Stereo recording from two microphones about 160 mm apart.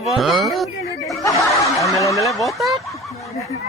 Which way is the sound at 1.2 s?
20° left (ahead or behind).